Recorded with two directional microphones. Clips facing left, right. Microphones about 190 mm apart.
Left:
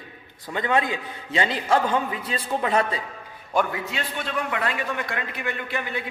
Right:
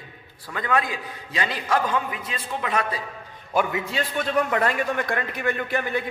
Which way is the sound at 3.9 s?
45° right (ahead or behind).